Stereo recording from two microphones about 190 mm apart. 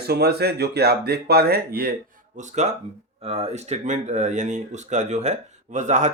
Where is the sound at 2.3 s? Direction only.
40° right (ahead or behind).